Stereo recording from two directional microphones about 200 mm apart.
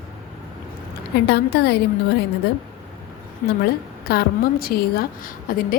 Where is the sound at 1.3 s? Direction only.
55° left (ahead or behind).